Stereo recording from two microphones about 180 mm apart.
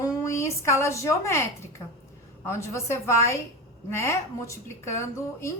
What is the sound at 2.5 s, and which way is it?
A woman's voice, 15° left (ahead or behind).